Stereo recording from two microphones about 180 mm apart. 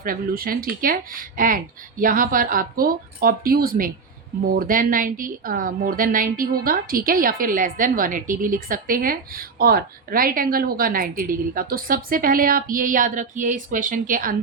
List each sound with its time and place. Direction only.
0.0 s a woman's voice: 50° right (ahead or behind)